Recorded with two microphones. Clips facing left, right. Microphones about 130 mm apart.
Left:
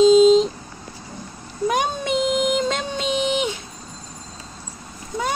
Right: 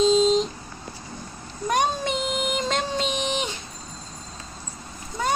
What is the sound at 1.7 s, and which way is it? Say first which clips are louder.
Child singing: even; 5° left (ahead or behind).